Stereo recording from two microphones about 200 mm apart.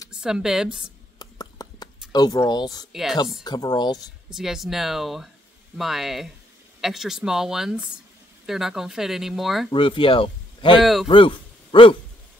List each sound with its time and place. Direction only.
0.1 s speech: 5° right (ahead or behind)
1.2 s a sound: 20° left (ahead or behind)
2.1 s speech: 20° left (ahead or behind)
2.9 s speech: centre (ahead or behind)
3.4 s speech: 20° left (ahead or behind)
4.3 s speech: centre (ahead or behind)
9.7 s speech: 25° left (ahead or behind)
10.8 s speech: centre (ahead or behind)
11.1 s speech: 25° left (ahead or behind)